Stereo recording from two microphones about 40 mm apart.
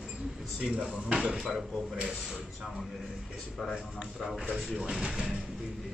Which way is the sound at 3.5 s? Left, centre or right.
Centre.